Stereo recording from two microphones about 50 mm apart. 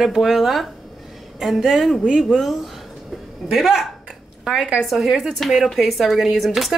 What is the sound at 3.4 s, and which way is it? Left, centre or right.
Speech, centre.